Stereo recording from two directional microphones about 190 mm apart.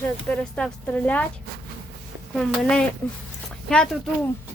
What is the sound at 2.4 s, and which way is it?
Speech, 5° left (ahead or behind).